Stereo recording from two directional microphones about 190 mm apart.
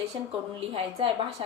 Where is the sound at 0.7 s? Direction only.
30° right (ahead or behind).